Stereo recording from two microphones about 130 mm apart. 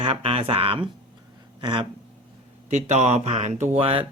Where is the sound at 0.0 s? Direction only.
45° right (ahead or behind).